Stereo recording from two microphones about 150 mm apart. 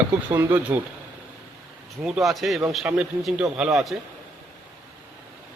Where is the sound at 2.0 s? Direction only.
Centre (ahead or behind).